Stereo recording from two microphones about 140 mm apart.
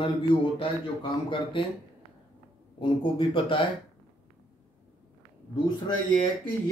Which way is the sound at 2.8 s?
35° left (ahead or behind).